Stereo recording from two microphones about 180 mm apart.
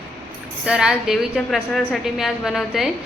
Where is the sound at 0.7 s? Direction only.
5° right (ahead or behind).